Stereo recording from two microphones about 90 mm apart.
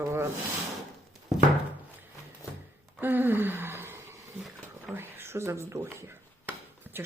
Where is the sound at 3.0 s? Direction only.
20° right (ahead or behind).